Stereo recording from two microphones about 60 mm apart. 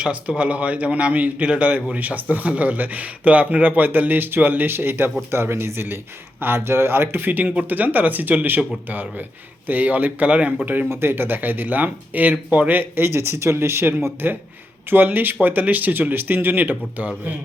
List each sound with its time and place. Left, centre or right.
0.0 s a man's voice: right
10.8 s speech: right